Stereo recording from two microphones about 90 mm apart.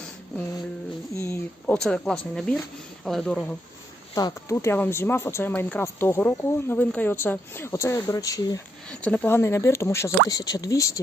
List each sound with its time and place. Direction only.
1.1 s a sound: 35° left (ahead or behind)
1.6 s speech: 10° left (ahead or behind)
4.1 s speech: 40° left (ahead or behind)
8.9 s speech: 15° left (ahead or behind)
9.3 s speech: 30° left (ahead or behind)
10.2 s speech: 45° left (ahead or behind)